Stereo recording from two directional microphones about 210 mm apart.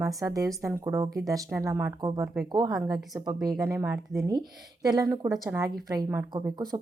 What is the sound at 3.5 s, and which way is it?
A woman's voice, 15° right (ahead or behind).